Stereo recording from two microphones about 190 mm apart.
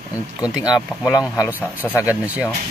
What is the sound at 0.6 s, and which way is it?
Speech, 20° left (ahead or behind).